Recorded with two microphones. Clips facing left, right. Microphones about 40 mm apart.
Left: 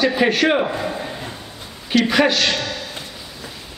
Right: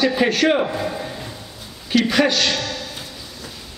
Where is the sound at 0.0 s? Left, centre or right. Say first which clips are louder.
Left 1 dB; centre.